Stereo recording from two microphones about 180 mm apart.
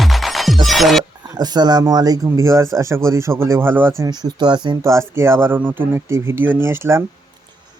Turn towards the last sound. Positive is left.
turn(degrees=-15)  # may be behind; listen again after turning